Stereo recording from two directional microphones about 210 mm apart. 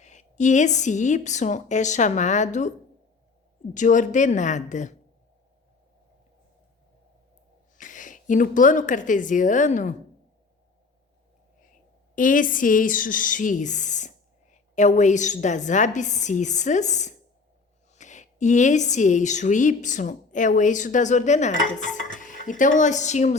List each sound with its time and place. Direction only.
0.0 s speech: 35° left (ahead or behind)
3.8 s speech: 35° left (ahead or behind)
7.8 s speech: 40° left (ahead or behind)
12.1 s speech: 40° left (ahead or behind)